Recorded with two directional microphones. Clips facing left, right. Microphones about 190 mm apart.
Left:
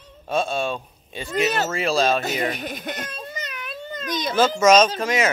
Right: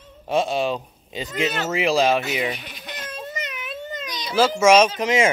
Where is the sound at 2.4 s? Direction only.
50° left (ahead or behind).